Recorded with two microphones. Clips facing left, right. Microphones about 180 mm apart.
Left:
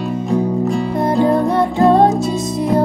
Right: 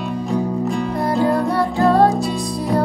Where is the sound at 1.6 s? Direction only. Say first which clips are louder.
Left 2 dB; 20° left (ahead or behind).